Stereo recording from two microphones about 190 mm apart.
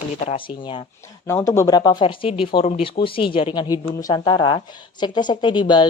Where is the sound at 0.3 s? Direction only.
25° left (ahead or behind).